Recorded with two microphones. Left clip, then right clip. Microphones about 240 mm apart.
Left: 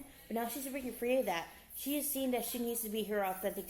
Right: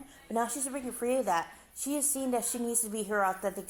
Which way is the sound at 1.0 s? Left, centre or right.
Right.